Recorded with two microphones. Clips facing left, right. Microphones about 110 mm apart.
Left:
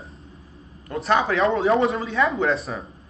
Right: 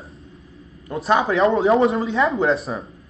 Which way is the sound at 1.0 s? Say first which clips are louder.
Right 2 dB; 15° right (ahead or behind).